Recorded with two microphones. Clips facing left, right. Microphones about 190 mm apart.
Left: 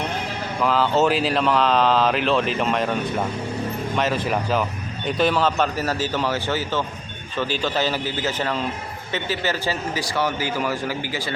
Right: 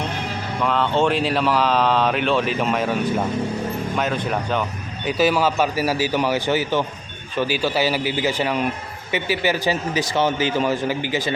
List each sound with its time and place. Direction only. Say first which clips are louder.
0.6 s a man's voice: left 1 dB; centre (ahead or behind); by 11.3 s 20° right (ahead or behind)